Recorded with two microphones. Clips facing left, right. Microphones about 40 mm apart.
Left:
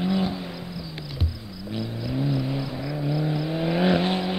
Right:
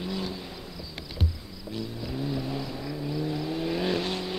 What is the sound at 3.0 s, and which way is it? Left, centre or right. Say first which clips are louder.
Vehicle: left 4 dB; left.